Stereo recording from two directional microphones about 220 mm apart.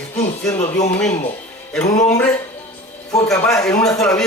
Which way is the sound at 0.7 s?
10° left (ahead or behind).